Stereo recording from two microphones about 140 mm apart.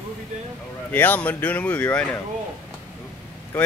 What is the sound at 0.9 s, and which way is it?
Speech, 15° left (ahead or behind).